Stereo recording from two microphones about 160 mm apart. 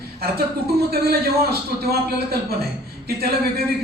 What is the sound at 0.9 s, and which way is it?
Speech, 75° right (ahead or behind).